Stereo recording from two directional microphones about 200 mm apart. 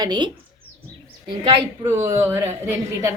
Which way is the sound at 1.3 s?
20° right (ahead or behind).